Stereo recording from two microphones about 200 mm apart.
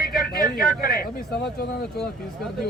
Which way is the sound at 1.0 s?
45° left (ahead or behind).